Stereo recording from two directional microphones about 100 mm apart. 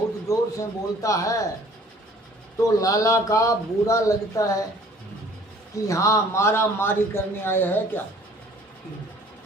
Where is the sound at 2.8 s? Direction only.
35° left (ahead or behind).